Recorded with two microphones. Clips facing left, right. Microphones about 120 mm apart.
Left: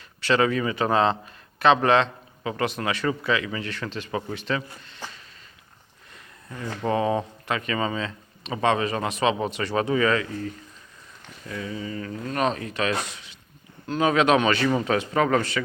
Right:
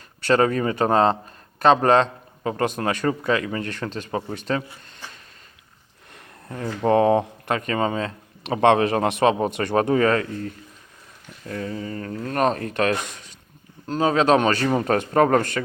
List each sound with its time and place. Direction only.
0.2 s a man's voice: 45° right (ahead or behind)
6.5 s a man's voice: 55° right (ahead or behind)
13.8 s a man's voice: 35° right (ahead or behind)